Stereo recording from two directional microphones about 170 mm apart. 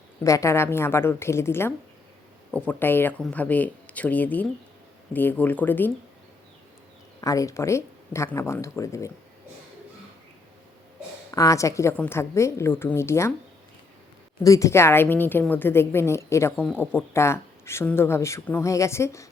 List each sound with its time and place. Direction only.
0.3 s speech: 15° left (ahead or behind)
7.2 s speech: 20° left (ahead or behind)
11.3 s speech: 20° left (ahead or behind)
14.4 s speech: 20° left (ahead or behind)